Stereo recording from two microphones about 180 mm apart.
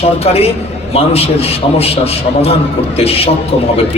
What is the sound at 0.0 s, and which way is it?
A man's voice, 35° left (ahead or behind).